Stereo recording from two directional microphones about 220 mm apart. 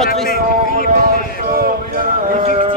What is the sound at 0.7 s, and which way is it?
Music, 40° right (ahead or behind).